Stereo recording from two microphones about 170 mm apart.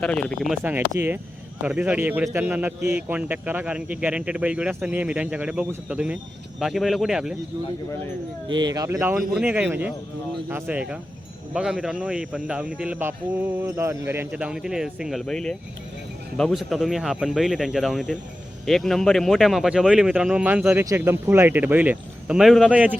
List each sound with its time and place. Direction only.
0.0 s speech: 5° left (ahead or behind)
0.9 s a man's voice: 15° right (ahead or behind)
8.4 s speech: 25° right (ahead or behind)
9.1 s a man's voice: 5° right (ahead or behind)